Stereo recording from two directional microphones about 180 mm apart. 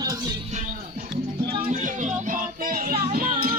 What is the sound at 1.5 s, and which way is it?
Music, 35° right (ahead or behind).